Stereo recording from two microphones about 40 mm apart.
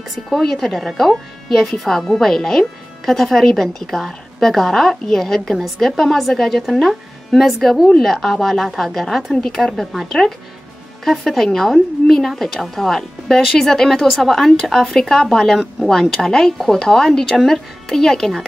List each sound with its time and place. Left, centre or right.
0.3 s a woman's voice: centre
17.3 s speech: centre
17.8 s a woman's voice: centre